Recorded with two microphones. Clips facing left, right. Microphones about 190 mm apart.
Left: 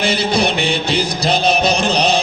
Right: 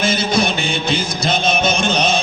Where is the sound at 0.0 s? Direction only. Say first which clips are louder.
Left 1 dB; 35° left (ahead or behind).